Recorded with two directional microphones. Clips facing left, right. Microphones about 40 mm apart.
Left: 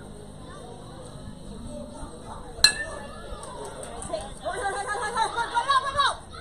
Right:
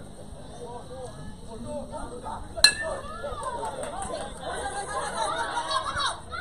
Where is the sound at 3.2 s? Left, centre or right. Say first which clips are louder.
Right 6 dB; right.